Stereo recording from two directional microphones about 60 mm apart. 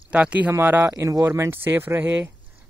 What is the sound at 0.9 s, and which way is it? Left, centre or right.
Speech, right.